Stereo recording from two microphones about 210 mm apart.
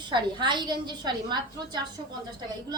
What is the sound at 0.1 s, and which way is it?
A woman's voice, 20° right (ahead or behind).